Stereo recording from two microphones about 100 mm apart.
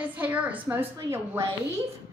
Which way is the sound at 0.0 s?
15° right (ahead or behind).